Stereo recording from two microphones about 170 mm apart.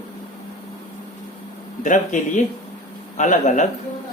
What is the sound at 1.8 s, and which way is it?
Speech, 50° left (ahead or behind).